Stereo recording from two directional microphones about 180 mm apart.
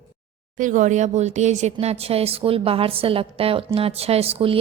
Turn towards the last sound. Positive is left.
turn(degrees=-30)  # may be behind; listen again after turning